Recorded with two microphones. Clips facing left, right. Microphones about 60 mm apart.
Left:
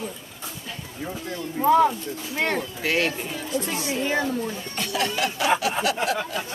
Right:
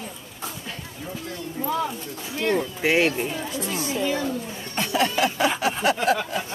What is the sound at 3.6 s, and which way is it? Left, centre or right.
Speech, left.